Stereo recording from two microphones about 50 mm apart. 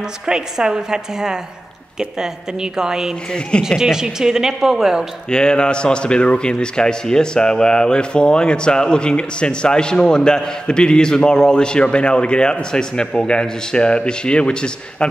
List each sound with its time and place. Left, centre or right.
0.3 s speech: centre
5.3 s a man's voice: centre